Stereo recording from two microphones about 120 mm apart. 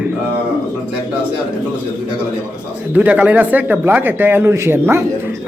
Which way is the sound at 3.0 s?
10° right (ahead or behind).